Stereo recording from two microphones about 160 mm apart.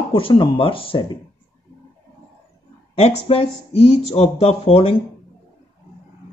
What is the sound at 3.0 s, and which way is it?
A man's voice, 35° left (ahead or behind).